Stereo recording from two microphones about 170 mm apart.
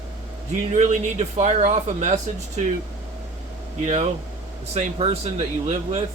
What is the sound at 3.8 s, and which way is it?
Speech, 45° right (ahead or behind).